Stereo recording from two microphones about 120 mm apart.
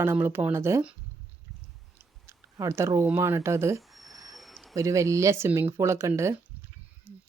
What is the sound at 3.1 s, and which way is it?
Speech, 20° right (ahead or behind).